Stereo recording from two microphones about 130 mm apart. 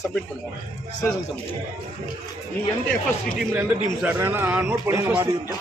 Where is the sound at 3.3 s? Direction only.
15° right (ahead or behind).